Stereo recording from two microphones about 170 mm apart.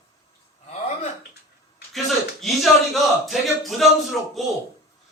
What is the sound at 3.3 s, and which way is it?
Speech, centre (ahead or behind).